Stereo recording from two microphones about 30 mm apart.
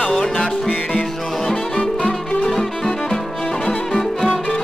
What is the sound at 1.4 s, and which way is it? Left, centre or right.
Music, left.